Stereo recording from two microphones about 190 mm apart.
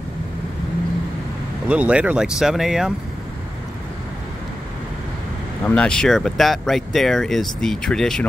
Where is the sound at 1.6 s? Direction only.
5° right (ahead or behind).